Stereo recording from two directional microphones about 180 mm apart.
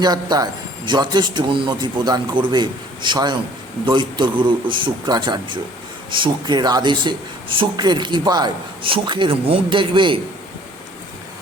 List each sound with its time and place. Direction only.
0.0 s speech: 20° right (ahead or behind)